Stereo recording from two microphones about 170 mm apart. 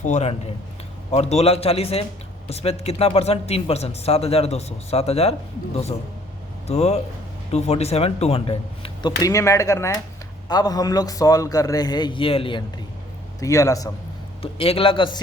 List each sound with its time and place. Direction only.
0.0 s speech: 40° left (ahead or behind)
6.7 s speech: 40° left (ahead or behind)
13.4 s speech: 20° left (ahead or behind)
14.4 s speech: 35° left (ahead or behind)